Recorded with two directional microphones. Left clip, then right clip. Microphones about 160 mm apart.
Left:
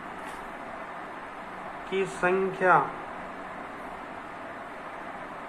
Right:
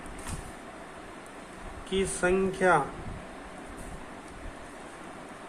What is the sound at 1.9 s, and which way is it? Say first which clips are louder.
Speech: left 1 dB; 45° right (ahead or behind).